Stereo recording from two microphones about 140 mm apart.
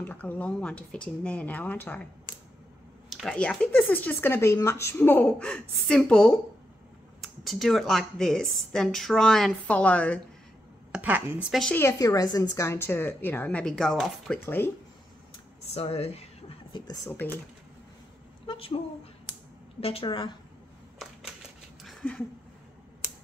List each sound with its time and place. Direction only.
0.0 s speech: 15° left (ahead or behind)
3.1 s speech: centre (ahead or behind)
10.9 s speech: 10° right (ahead or behind)
11.7 s speech: 20° left (ahead or behind); by 14.4 s centre (ahead or behind)
14.4 s speech: 15° left (ahead or behind)
15.6 s speech: 45° left (ahead or behind)
16.7 s speech: 30° left (ahead or behind)
18.5 s a sound: 40° left (ahead or behind)
19.8 s a woman's voice: 45° left (ahead or behind)
21.8 s a sound: 5° left (ahead or behind)